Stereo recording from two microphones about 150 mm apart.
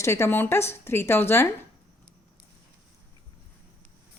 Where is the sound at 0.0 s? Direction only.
15° left (ahead or behind).